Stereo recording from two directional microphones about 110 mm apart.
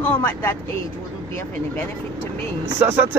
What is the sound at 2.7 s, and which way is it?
Speech, 15° right (ahead or behind).